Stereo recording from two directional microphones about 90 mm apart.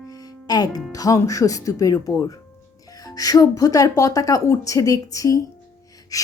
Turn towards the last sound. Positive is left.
turn(degrees=40)  # may be behind; listen again after turning